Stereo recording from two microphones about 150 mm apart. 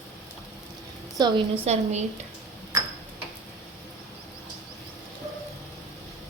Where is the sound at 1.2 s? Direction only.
30° right (ahead or behind).